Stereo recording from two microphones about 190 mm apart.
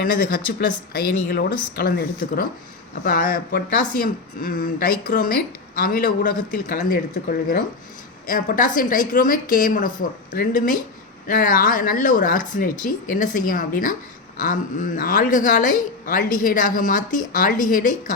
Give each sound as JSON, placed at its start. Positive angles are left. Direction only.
{"t": 0.0, "sound": "speech", "side_deg": 50}
{"t": 11.3, "sound": "speech", "side_deg": 45}